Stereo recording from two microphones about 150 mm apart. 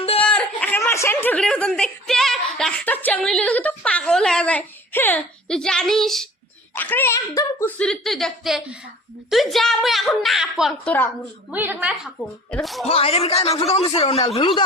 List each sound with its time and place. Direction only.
0.2 s a sound: 10° left (ahead or behind)
0.8 s speech: 20° left (ahead or behind); by 6.2 s centre (ahead or behind)
6.7 s speech: 15° left (ahead or behind)
7.8 s a woman's voice: 5° left (ahead or behind)
11.5 s a woman's voice: 15° right (ahead or behind)
12.5 s a woman's voice: 5° left (ahead or behind)
12.8 s a man's voice: 40° left (ahead or behind)